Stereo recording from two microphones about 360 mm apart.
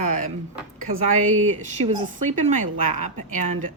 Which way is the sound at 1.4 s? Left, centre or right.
Centre.